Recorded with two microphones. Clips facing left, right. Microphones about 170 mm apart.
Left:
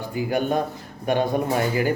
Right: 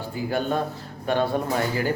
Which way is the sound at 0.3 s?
15° left (ahead or behind).